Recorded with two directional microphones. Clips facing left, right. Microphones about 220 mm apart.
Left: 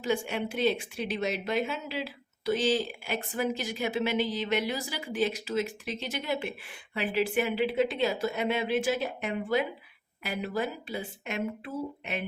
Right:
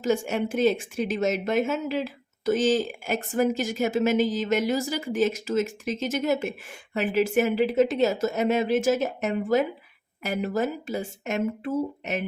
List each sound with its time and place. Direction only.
0.0 s speech: 45° right (ahead or behind)